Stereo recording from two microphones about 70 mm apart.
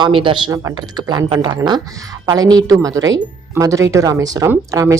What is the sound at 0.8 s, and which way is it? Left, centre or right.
Speech, right.